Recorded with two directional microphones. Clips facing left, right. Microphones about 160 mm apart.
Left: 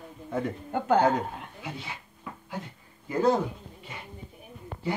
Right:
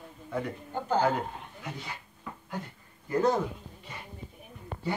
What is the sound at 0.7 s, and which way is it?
Speech, 65° left (ahead or behind).